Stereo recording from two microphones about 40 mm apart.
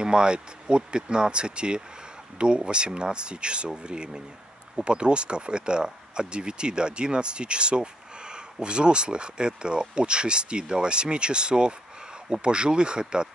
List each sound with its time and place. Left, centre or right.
0.0 s speech: right